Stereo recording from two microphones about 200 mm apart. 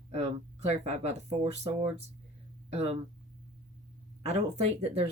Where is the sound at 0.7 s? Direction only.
35° right (ahead or behind).